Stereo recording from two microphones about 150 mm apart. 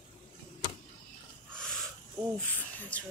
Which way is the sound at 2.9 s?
10° left (ahead or behind).